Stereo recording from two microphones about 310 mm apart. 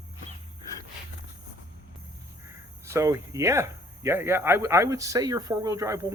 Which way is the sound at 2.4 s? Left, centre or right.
Centre.